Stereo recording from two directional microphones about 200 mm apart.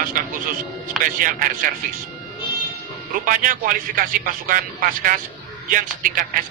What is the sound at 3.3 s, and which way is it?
A man's voice, 40° right (ahead or behind).